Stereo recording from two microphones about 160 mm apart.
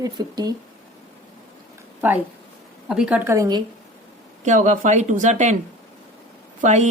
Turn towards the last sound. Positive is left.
turn(degrees=-45)  # may be behind; listen again after turning